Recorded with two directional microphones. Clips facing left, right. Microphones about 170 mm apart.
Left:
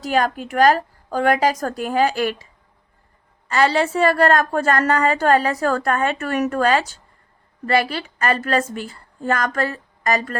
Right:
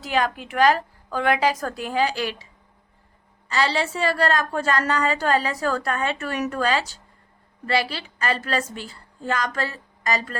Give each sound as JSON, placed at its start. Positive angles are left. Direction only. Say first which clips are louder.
{"t": 0.0, "sound": "a woman's voice", "louder": "left 4 dB", "side_deg": 45}
{"t": 3.5, "sound": "a woman's voice", "louder": "left 5 dB", "side_deg": 50}